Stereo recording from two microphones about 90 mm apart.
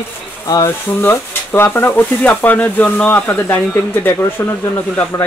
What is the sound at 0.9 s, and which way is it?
Speech, 25° left (ahead or behind).